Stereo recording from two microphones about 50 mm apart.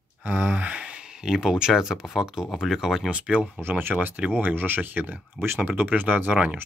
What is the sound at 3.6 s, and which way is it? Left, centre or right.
Speech, right.